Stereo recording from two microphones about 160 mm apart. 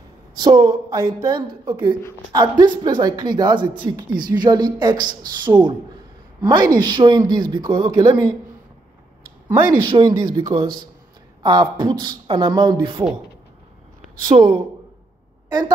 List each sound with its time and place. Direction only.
0.4 s speech: 25° right (ahead or behind)
9.8 s speech: 25° right (ahead or behind)
14.3 s speech: 25° right (ahead or behind)